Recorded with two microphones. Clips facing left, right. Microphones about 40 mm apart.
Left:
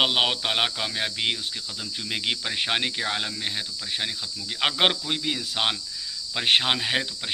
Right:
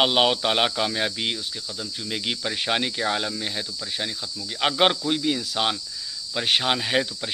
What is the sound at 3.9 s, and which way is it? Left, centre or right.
Speech, left.